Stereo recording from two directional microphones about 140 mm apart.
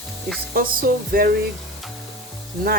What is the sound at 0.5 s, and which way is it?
Speech, 90° right.